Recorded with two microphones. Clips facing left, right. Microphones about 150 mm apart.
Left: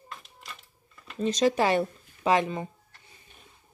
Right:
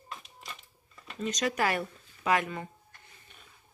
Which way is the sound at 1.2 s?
30° left (ahead or behind).